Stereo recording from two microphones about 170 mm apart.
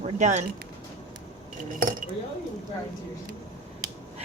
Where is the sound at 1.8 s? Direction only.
55° right (ahead or behind).